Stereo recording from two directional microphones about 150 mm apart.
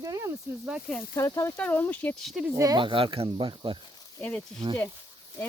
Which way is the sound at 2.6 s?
30° right (ahead or behind).